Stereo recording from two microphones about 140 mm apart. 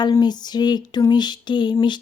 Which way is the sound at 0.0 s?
30° left (ahead or behind).